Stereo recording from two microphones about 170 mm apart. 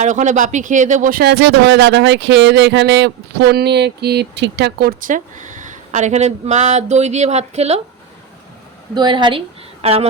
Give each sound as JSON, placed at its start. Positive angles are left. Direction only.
{"t": 0.0, "sound": "speech", "side_deg": -45}
{"t": 9.0, "sound": "a woman's voice", "side_deg": -25}